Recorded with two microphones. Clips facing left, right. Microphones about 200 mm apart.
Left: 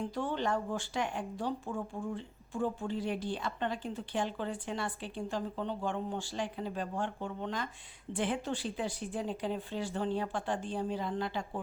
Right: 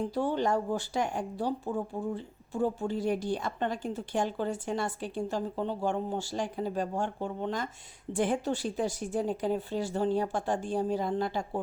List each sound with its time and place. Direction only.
0.0 s a woman's voice: 35° right (ahead or behind)